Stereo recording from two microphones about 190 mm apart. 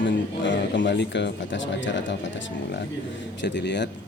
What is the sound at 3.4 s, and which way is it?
Speech, 65° left (ahead or behind).